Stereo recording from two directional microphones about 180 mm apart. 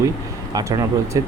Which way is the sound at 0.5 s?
20° right (ahead or behind).